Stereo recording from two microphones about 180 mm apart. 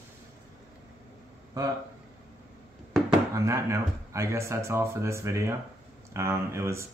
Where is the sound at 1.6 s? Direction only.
20° right (ahead or behind).